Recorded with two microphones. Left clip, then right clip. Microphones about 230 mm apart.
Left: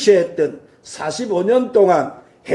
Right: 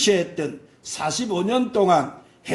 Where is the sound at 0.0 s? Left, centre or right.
Right.